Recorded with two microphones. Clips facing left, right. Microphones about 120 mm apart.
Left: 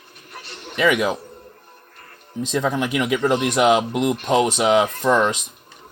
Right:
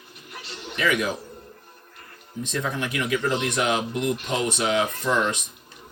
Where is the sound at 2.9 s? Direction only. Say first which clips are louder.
Left 3 dB; 90° left.